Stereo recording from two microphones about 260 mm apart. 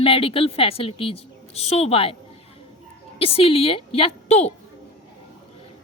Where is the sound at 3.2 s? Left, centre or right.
Left.